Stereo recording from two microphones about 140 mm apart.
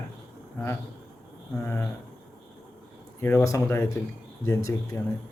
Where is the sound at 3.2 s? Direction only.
15° left (ahead or behind).